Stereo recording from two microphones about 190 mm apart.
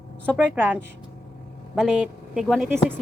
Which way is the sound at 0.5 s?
10° right (ahead or behind).